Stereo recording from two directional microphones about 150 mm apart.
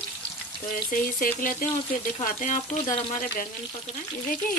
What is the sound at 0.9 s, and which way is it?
Speech, 65° left (ahead or behind).